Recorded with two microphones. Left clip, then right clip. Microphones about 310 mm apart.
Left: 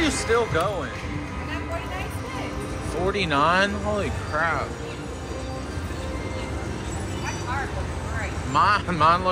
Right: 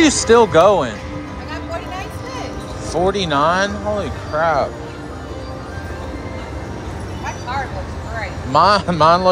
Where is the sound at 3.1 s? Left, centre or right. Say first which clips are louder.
Right 4 dB; centre.